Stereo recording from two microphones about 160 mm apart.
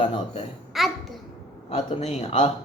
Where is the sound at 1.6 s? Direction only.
40° left (ahead or behind).